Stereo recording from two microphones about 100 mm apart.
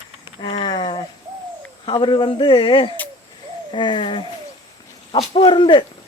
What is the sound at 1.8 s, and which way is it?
Speech, 55° left (ahead or behind).